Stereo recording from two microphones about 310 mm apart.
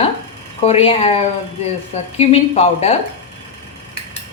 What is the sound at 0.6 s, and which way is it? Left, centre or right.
A woman's voice, centre.